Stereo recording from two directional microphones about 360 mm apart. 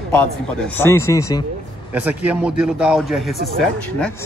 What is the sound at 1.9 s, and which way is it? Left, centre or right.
Speech, centre.